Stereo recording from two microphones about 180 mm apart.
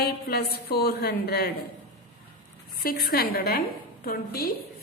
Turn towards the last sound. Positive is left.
turn(degrees=60)  # may be behind; listen again after turning